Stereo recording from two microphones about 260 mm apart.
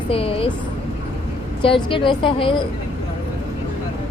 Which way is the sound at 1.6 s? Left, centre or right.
Centre.